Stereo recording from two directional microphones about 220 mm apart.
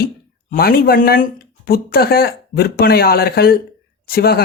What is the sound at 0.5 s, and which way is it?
Speech, 45° left (ahead or behind).